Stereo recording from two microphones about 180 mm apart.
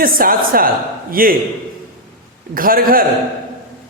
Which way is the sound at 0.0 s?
55° right (ahead or behind).